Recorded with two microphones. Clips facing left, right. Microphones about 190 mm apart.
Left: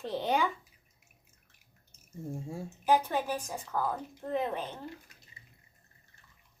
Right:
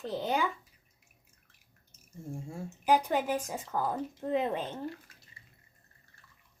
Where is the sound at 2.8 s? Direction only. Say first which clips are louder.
Right 1 dB; 15° right (ahead or behind).